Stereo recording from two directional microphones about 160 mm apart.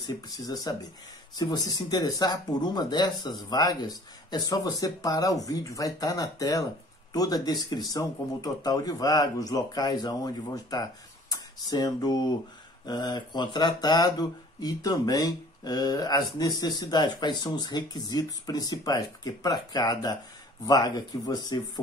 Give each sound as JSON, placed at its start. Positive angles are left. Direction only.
{"t": 0.0, "sound": "speech", "side_deg": 25}